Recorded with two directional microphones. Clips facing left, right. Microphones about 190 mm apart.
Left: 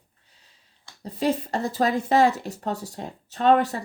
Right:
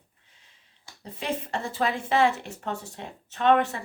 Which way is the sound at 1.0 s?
35° left (ahead or behind).